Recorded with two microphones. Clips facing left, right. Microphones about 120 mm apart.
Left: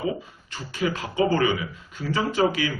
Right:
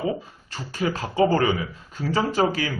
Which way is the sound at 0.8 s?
40° right (ahead or behind).